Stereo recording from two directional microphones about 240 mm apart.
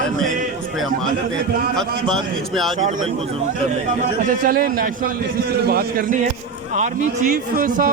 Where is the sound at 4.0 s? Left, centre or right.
Right.